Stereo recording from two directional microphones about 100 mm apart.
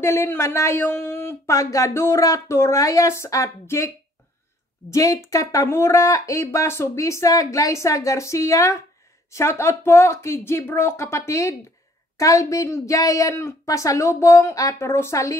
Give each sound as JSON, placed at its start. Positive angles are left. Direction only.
{"t": 0.0, "sound": "a man's voice", "side_deg": 25}